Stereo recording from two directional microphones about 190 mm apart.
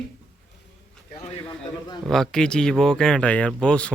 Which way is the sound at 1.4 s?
20° left (ahead or behind).